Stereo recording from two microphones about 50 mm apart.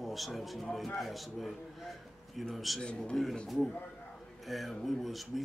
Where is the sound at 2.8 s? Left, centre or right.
Centre.